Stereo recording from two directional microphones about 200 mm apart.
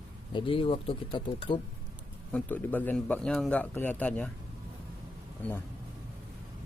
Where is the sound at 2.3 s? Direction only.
10° left (ahead or behind).